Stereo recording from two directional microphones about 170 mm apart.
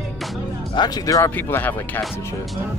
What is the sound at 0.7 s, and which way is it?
Speech, 25° left (ahead or behind).